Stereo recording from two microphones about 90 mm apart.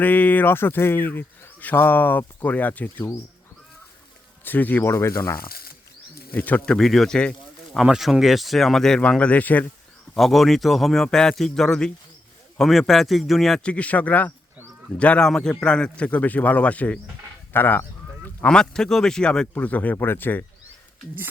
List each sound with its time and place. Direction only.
0.0 s speech: 20° left (ahead or behind)
4.4 s speech: 20° left (ahead or behind)
6.3 s speech: 20° left (ahead or behind)
6.7 s speech: 5° left (ahead or behind)
7.8 s a man's voice: 5° right (ahead or behind); by 9.6 s 15° left (ahead or behind)
10.2 s a man's voice: centre (ahead or behind); by 17.8 s 25° left (ahead or behind)
18.4 s speech: 10° left (ahead or behind)